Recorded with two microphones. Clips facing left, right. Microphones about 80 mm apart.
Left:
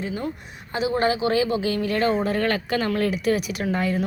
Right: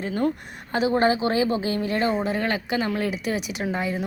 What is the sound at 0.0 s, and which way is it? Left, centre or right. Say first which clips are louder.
A woman's voice: right 4 dB; right.